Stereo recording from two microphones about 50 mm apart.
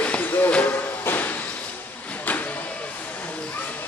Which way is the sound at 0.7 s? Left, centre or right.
Left.